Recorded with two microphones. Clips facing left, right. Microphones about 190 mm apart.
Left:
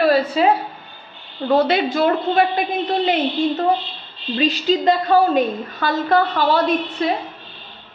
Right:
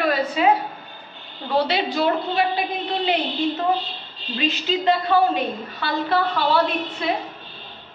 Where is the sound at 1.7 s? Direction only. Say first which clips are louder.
Left 4 dB; 50° left (ahead or behind).